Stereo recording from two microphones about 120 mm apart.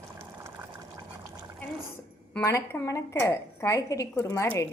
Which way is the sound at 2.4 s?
25° left (ahead or behind).